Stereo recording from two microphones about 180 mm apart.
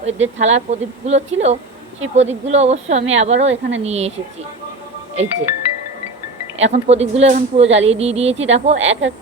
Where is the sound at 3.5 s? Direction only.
90° right.